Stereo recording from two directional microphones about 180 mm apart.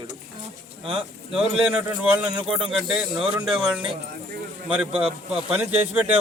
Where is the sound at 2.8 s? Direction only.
5° right (ahead or behind).